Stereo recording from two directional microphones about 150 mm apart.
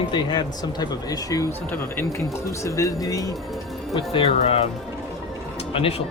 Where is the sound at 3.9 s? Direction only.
40° left (ahead or behind).